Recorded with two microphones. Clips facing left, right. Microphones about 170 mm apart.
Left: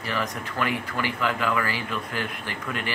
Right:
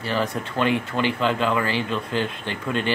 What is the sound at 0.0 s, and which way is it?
Speech, 30° right (ahead or behind).